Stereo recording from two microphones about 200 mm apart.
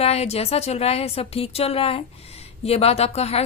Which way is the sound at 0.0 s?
30° left (ahead or behind).